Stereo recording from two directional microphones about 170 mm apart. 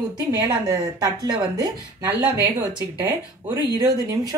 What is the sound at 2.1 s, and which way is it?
Speech, 10° right (ahead or behind).